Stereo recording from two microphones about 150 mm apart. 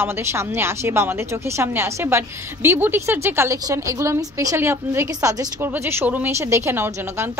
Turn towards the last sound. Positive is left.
turn(degrees=-15)  # may be behind; listen again after turning